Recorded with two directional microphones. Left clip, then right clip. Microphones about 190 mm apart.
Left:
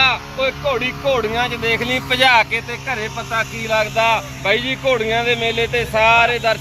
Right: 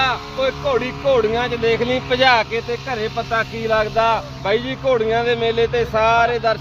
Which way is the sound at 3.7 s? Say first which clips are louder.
Left 1 dB; 30° right (ahead or behind).